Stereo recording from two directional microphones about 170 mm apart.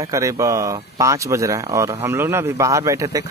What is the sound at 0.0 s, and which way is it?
Speech, 20° right (ahead or behind).